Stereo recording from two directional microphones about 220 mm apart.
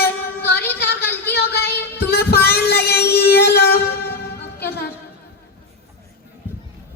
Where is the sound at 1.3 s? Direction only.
45° left (ahead or behind).